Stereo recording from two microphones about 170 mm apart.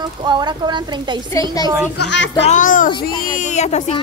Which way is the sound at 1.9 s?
85° left.